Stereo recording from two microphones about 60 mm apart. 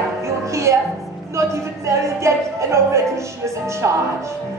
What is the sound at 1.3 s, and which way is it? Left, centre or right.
Speech, right.